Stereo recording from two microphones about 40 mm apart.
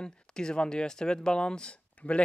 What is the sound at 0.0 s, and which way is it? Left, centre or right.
Speech, left.